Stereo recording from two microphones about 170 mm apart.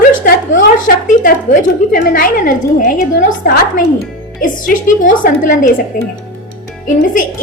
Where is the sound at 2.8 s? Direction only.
55° left (ahead or behind).